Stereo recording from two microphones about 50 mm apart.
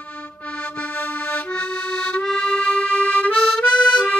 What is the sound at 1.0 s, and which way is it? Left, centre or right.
Music, left.